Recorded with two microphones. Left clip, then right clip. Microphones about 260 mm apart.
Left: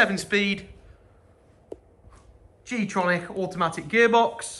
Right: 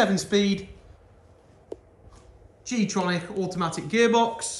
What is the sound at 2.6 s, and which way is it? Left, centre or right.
Speech, centre.